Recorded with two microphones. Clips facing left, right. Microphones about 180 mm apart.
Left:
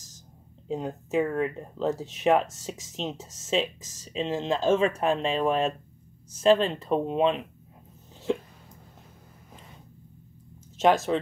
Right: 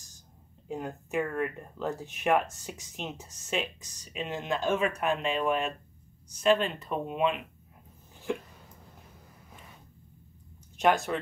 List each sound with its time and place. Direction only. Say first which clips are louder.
0.7 s speech: left 5 dB; 20° left (ahead or behind)
10.8 s speech: left 4 dB; 20° left (ahead or behind)